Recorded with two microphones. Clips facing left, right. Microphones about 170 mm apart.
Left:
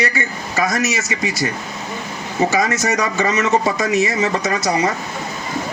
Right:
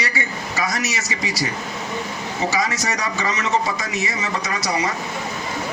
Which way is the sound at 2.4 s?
50° left (ahead or behind).